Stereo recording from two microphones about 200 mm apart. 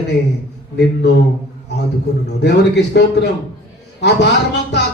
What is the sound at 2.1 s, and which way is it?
A man's voice, 55° left (ahead or behind).